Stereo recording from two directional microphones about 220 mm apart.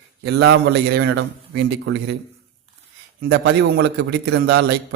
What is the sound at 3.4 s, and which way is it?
A man's voice, 55° right (ahead or behind).